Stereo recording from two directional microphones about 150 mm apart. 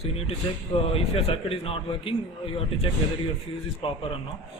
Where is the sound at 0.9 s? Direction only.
40° left (ahead or behind).